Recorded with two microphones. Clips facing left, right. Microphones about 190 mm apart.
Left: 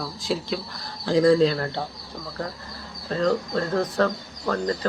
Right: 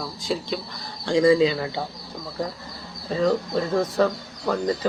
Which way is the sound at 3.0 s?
5° right (ahead or behind).